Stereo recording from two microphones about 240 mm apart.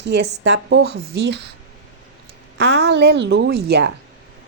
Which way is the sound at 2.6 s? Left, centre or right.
Right.